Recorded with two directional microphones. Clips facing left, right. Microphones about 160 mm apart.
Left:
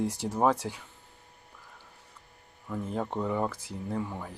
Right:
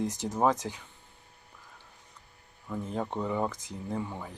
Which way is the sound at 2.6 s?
Centre (ahead or behind).